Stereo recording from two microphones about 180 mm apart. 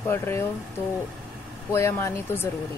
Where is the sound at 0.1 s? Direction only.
15° left (ahead or behind).